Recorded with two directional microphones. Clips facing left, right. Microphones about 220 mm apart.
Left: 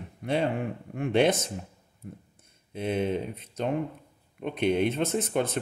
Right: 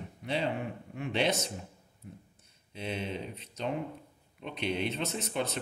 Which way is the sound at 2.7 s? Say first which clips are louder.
Left 8 dB; 50° left (ahead or behind).